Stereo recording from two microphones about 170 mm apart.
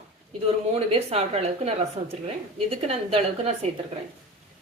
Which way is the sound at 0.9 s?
35° right (ahead or behind).